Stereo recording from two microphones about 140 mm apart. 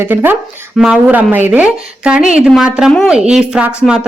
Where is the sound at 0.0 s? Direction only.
15° right (ahead or behind).